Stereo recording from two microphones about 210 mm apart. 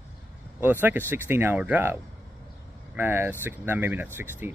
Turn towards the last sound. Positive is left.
turn(degrees=-10)  # may be behind; listen again after turning